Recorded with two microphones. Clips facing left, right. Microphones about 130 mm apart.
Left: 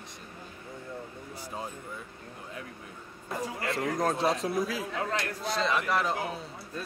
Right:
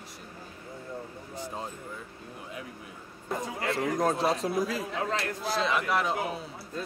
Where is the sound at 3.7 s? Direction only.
Centre (ahead or behind).